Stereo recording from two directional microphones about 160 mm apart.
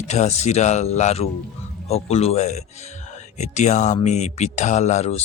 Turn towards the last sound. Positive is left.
turn(degrees=45)  # may be behind; listen again after turning